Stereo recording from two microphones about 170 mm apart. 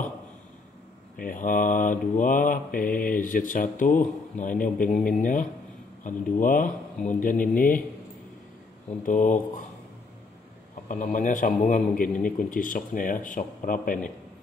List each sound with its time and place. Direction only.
1.1 s mantra: 55° left (ahead or behind)
9.0 s mantra: 45° left (ahead or behind)
10.9 s mantra: 45° left (ahead or behind)